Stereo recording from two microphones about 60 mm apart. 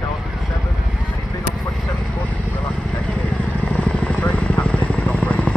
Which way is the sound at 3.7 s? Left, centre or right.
Left.